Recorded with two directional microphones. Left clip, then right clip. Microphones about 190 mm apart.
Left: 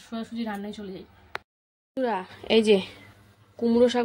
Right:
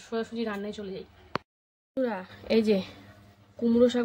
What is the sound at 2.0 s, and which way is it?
Speech, 20° left (ahead or behind).